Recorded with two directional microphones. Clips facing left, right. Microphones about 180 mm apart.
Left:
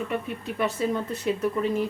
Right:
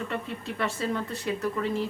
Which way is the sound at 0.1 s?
15° left (ahead or behind).